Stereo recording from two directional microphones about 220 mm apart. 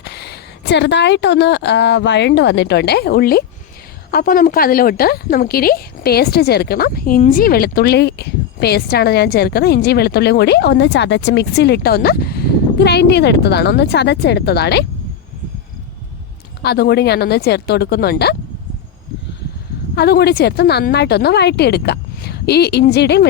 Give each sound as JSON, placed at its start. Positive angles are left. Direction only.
{"t": 0.0, "sound": "a woman's voice", "side_deg": 50}
{"t": 16.6, "sound": "a woman's voice", "side_deg": 45}
{"t": 20.0, "sound": "a woman's voice", "side_deg": 45}